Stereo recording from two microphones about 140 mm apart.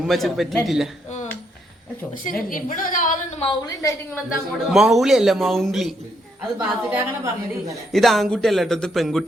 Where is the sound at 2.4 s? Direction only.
75° left (ahead or behind).